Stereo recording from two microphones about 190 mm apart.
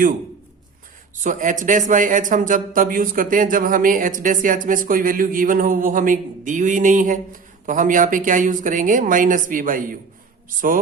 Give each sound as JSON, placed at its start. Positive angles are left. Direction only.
{"t": 1.2, "sound": "speech", "side_deg": -40}